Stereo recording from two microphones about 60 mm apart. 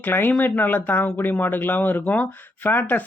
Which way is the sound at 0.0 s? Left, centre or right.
Left.